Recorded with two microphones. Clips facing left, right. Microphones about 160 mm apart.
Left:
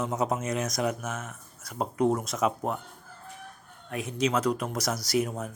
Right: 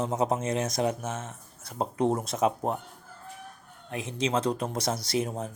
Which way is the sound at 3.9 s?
25° right (ahead or behind).